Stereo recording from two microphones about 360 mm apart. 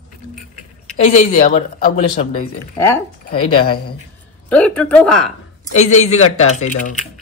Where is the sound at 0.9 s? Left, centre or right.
Left.